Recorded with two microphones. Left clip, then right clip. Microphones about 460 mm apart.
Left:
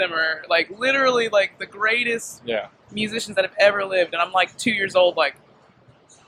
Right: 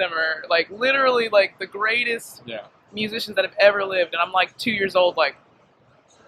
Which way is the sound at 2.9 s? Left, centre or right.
Left.